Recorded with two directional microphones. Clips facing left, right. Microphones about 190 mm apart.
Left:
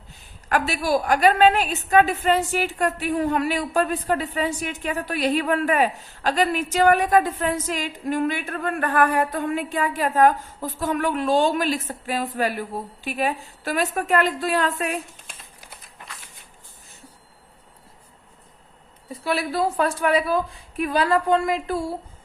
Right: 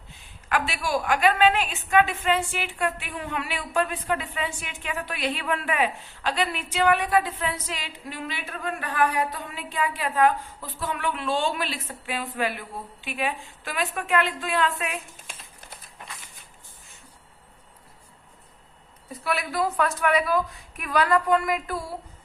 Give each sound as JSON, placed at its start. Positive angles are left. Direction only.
{"t": 0.1, "sound": "a woman's voice", "side_deg": 40}
{"t": 19.2, "sound": "a woman's voice", "side_deg": 30}